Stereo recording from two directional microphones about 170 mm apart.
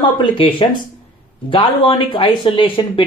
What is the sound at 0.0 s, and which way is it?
Speech, 30° left (ahead or behind).